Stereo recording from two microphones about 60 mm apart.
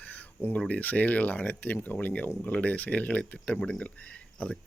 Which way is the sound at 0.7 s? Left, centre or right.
Left.